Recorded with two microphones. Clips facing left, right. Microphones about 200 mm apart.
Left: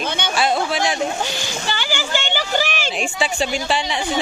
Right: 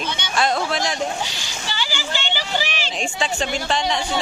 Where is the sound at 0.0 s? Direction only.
55° left (ahead or behind).